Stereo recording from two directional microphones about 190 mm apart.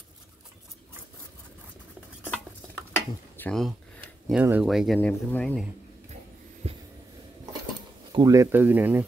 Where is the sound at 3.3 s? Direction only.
5° left (ahead or behind).